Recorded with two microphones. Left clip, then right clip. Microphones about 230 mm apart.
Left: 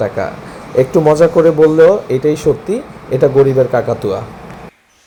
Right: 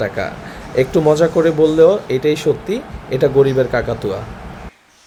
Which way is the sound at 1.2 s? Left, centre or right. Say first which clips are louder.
Left 5 dB; centre.